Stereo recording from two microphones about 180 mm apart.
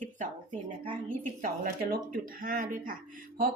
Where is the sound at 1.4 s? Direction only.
55° right (ahead or behind).